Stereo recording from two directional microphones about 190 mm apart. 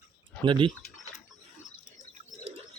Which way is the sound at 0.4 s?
25° right (ahead or behind).